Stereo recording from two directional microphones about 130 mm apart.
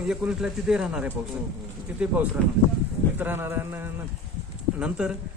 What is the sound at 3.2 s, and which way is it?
Speech, 15° right (ahead or behind).